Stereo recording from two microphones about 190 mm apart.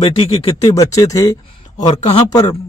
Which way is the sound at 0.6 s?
20° left (ahead or behind).